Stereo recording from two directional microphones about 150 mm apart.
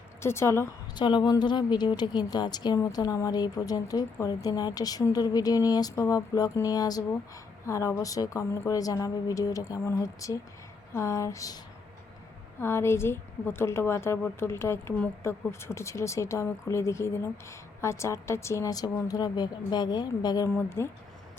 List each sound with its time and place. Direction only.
0.2 s a woman's voice: 15° left (ahead or behind)
0.9 s a woman's voice: 30° left (ahead or behind)